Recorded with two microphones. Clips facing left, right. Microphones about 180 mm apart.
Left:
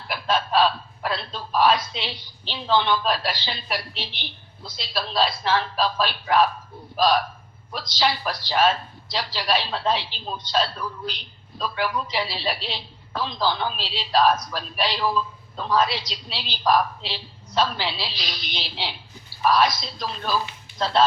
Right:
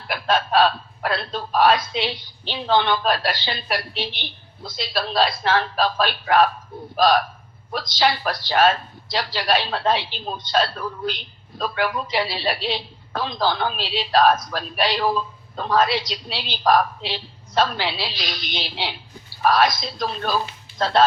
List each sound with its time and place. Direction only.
0.1 s a man's voice: 55° right (ahead or behind)